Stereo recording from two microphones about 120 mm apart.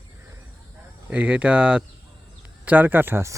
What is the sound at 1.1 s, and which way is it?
Speech, 10° right (ahead or behind).